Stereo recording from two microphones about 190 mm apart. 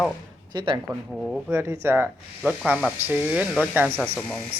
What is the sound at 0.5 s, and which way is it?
Speech, 25° right (ahead or behind).